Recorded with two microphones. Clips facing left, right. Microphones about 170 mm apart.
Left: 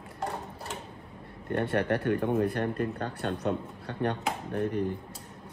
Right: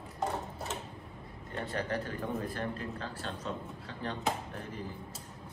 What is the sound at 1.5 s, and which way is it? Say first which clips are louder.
Speech: left 8 dB; 65° left (ahead or behind).